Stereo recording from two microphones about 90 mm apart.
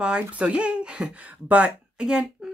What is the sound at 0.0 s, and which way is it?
Speech, 15° right (ahead or behind).